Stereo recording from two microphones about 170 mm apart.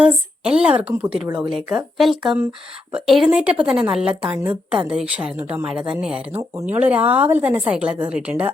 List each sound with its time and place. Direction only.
0.0 s a woman's voice: 5° right (ahead or behind)
1.1 s speech: 30° right (ahead or behind)
1.4 s a woman's voice: 5° right (ahead or behind)